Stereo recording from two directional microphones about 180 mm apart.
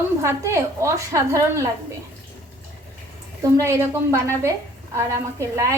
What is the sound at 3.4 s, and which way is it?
A woman's voice, 15° right (ahead or behind).